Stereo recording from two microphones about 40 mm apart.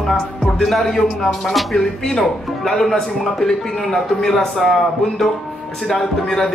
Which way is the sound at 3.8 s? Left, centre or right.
Centre.